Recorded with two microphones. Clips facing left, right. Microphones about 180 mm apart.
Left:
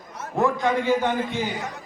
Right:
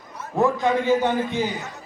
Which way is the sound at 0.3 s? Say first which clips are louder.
Right 2 dB; 15° right (ahead or behind).